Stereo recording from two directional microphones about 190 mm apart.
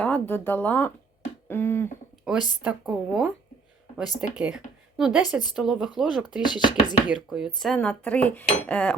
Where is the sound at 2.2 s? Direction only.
5° right (ahead or behind).